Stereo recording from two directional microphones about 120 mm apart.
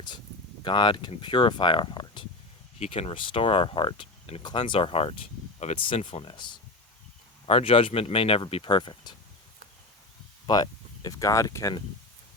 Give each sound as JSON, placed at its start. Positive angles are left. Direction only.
{"t": 0.6, "sound": "speech", "side_deg": 40}
{"t": 2.7, "sound": "speech", "side_deg": 60}
{"t": 5.7, "sound": "speech", "side_deg": 45}
{"t": 7.4, "sound": "speech", "side_deg": 50}
{"t": 10.4, "sound": "speech", "side_deg": 35}